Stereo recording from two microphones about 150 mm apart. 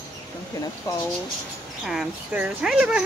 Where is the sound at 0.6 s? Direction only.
25° left (ahead or behind).